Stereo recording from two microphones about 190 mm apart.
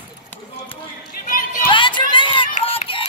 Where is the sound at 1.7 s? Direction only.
25° left (ahead or behind).